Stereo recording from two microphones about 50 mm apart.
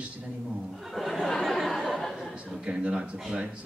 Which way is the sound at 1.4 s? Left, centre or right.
Centre.